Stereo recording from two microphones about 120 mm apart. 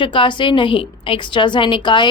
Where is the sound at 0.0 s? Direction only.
45° left (ahead or behind).